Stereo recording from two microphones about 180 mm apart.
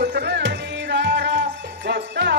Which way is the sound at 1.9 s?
75° right (ahead or behind).